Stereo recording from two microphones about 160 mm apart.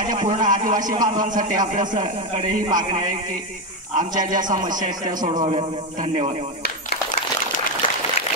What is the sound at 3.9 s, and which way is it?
A man's voice, 55° right (ahead or behind).